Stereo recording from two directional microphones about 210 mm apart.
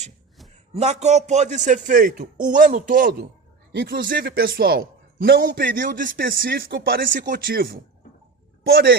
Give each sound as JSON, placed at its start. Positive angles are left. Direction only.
{"t": 0.7, "sound": "a man's voice", "side_deg": -30}
{"t": 3.7, "sound": "a man's voice", "side_deg": -50}